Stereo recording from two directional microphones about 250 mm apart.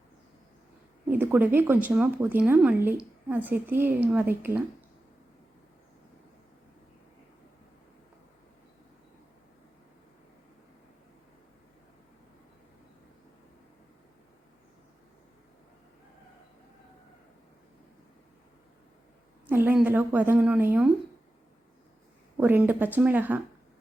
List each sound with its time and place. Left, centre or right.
1.0 s speech: centre
19.5 s speech: centre
22.4 s speech: centre